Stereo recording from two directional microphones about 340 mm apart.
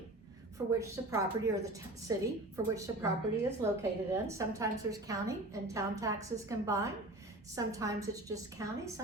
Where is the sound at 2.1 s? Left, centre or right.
Centre.